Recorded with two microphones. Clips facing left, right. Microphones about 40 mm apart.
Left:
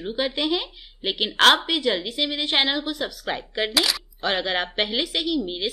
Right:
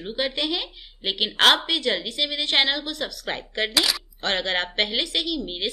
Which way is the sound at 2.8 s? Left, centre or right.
Centre.